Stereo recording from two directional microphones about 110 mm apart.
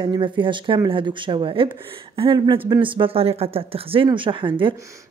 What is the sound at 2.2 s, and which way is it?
Speech, 40° right (ahead or behind).